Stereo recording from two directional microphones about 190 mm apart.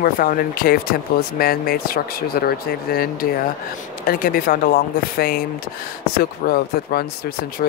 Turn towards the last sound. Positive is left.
turn(degrees=55)  # may be behind; listen again after turning